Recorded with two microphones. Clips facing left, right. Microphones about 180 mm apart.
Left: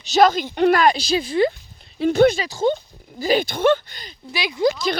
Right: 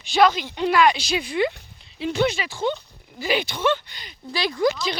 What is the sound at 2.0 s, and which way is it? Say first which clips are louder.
Speech: left 7 dB; 45° left (ahead or behind).